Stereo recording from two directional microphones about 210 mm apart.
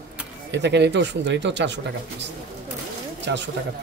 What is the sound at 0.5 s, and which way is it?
Speech, 55° right (ahead or behind).